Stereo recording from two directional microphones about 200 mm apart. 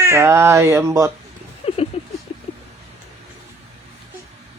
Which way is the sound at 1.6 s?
30° left (ahead or behind).